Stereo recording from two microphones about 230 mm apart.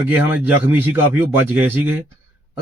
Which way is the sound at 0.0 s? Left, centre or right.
Centre.